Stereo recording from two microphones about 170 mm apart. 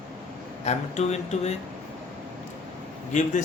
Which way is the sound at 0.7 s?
40° left (ahead or behind).